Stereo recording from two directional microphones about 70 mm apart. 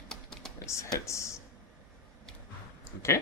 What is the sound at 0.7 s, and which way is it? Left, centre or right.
Speech, left.